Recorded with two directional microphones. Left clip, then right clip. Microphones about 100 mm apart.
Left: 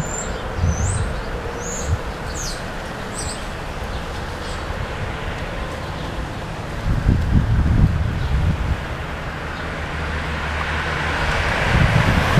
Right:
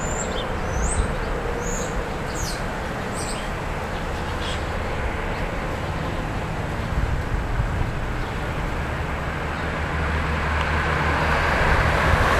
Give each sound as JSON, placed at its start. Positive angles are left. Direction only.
{"t": 10.9, "sound": "vehicle", "side_deg": 30}